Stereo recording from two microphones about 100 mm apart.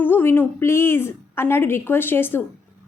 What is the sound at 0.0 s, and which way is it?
A woman's voice, 20° left (ahead or behind).